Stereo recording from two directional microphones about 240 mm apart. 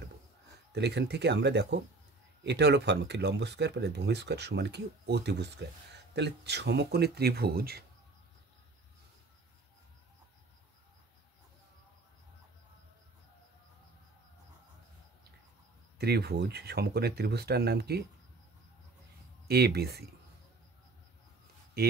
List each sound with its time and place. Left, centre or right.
0.7 s speech: right
16.0 s speech: right
19.4 s speech: right
21.8 s speech: right